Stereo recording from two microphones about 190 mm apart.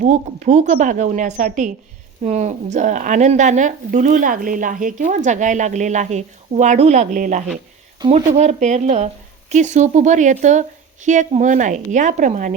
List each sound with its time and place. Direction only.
0.0 s speech: 40° right (ahead or behind)